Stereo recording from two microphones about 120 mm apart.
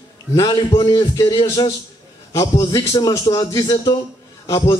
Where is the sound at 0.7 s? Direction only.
45° left (ahead or behind).